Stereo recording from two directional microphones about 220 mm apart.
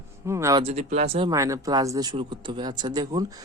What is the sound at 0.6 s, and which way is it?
Speech, 30° right (ahead or behind).